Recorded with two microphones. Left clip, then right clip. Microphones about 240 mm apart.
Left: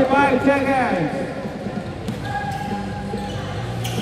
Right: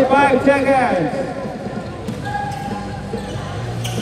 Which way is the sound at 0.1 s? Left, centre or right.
Right.